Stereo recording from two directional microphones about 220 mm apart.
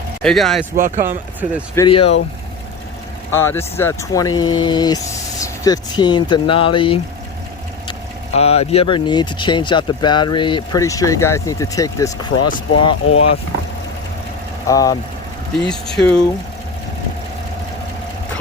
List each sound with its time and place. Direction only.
0.2 s speech: centre (ahead or behind)
0.8 s speech: 35° right (ahead or behind)
1.7 s speech: 20° left (ahead or behind)
3.3 s speech: 10° left (ahead or behind)
8.4 s speech: 30° left (ahead or behind)
14.7 s speech: 15° left (ahead or behind)
15.6 s speech: centre (ahead or behind)